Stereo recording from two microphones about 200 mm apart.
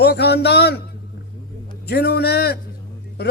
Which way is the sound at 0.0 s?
55° left (ahead or behind).